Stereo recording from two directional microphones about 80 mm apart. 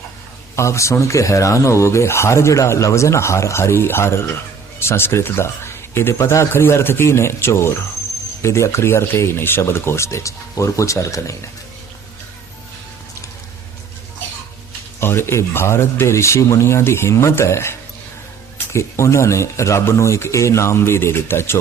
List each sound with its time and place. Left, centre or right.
0.5 s speech: left
15.0 s speech: left